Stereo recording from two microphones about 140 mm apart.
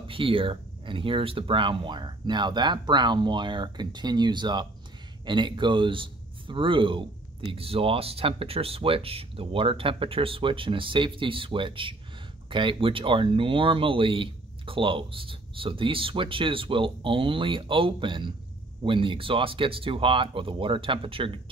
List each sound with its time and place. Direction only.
0.0 s a man's voice: 40° right (ahead or behind)